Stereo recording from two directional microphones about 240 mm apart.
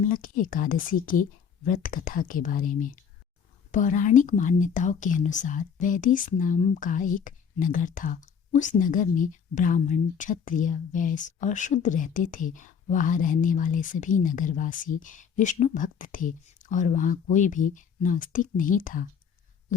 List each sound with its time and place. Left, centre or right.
0.1 s speech: left